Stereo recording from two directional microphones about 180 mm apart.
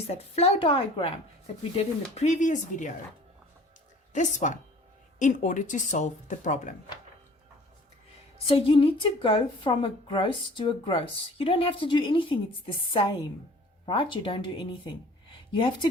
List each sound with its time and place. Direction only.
0.1 s speech: 35° left (ahead or behind)
4.1 s speech: 45° left (ahead or behind)
8.4 s a woman's voice: 30° left (ahead or behind)